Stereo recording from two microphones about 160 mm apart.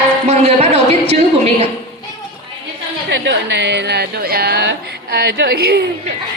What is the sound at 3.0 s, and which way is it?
Speech, 90° right.